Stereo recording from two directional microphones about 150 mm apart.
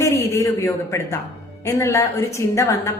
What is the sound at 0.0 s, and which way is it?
A woman's voice, 20° left (ahead or behind).